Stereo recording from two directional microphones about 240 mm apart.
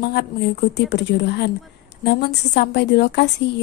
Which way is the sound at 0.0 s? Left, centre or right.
Left.